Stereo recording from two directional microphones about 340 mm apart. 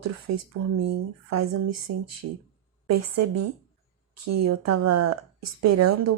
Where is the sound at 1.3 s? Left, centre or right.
Right.